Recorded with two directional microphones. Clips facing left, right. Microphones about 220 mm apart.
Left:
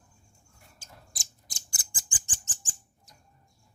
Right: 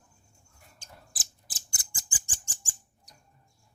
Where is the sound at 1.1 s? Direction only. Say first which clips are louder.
Left 1 dB; 5° right (ahead or behind).